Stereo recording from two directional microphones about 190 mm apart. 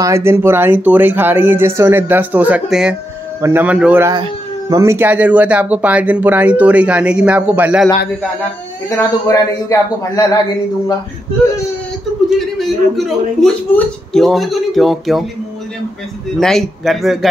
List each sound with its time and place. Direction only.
0.0 s speech: 15° right (ahead or behind)
4.1 s speech: 20° right (ahead or behind)
8.8 s a man's voice: 15° left (ahead or behind)
12.4 s speech: centre (ahead or behind)
16.3 s speech: centre (ahead or behind)